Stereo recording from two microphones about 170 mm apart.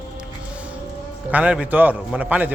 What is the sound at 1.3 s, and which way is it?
A man's voice, 10° right (ahead or behind).